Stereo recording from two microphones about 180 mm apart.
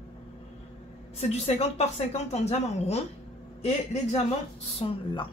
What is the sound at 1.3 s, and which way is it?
Speech, 35° left (ahead or behind).